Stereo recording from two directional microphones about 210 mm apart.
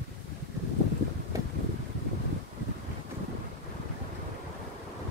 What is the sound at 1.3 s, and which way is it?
Boat, 15° right (ahead or behind).